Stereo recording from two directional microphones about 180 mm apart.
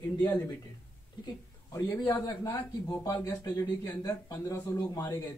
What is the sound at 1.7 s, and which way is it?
Speech, 15° left (ahead or behind).